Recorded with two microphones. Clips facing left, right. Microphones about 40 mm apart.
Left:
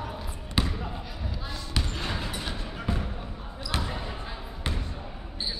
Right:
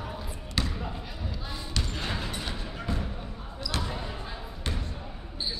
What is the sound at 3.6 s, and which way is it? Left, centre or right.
Basketball bounce, left.